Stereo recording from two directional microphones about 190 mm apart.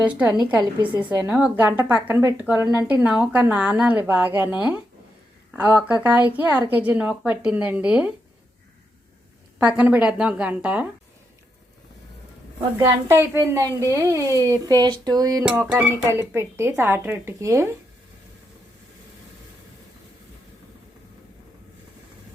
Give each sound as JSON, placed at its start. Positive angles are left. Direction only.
{"t": 0.0, "sound": "a woman's voice", "side_deg": -5}
{"t": 9.6, "sound": "a woman's voice", "side_deg": -10}
{"t": 13.1, "sound": "a woman's voice", "side_deg": -10}
{"t": 15.4, "sound": "a woman's voice", "side_deg": -5}